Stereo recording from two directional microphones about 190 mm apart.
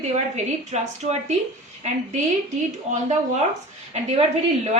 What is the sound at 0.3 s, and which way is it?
Speech, 35° right (ahead or behind).